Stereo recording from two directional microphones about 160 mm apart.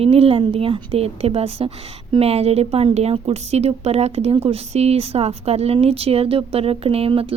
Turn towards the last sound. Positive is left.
turn(degrees=-35)  # may be behind; listen again after turning